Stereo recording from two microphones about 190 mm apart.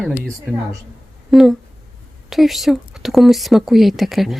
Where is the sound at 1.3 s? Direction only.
Centre (ahead or behind).